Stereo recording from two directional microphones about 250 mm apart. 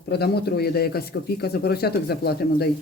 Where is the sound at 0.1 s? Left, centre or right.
Left.